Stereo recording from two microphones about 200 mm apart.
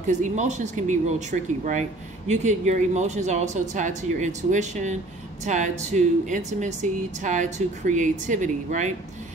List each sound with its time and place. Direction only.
0.0 s speech: 35° right (ahead or behind)